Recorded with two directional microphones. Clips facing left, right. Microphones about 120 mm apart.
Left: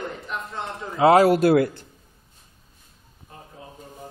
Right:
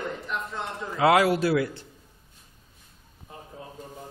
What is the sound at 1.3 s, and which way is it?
Speech, 50° left (ahead or behind).